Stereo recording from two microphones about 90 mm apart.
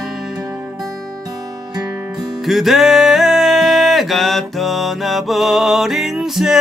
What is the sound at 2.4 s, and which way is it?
Music, centre (ahead or behind).